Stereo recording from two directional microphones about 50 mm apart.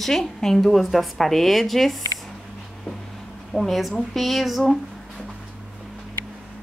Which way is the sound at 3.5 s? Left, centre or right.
Centre.